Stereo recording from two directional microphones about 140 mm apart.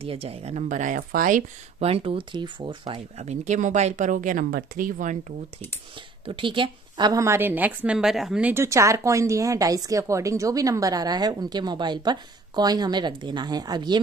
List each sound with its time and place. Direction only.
0.0 s speech: 45° right (ahead or behind)
0.7 s speech: 65° right (ahead or behind)
1.8 s speech: 45° right (ahead or behind)
3.2 s speech: 55° right (ahead or behind); by 5.1 s 80° right
6.2 s a woman's voice: 35° right (ahead or behind)